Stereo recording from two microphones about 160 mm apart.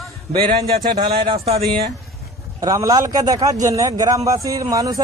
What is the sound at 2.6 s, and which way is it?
Speech, 20° right (ahead or behind).